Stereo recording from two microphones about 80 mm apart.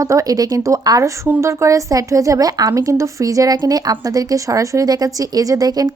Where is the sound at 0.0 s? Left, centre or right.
Right.